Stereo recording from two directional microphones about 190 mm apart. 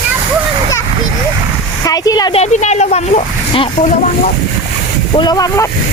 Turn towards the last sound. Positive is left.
turn(degrees=20)  # may be behind; listen again after turning